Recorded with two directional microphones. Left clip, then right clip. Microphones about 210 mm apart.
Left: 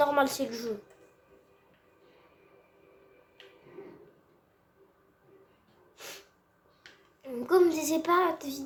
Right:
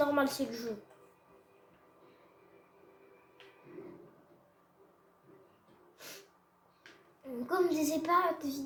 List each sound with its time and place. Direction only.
0.0 s a woman's voice: 30° left (ahead or behind)
6.0 s snort: 35° left (ahead or behind)
7.4 s a child's voice: 35° left (ahead or behind)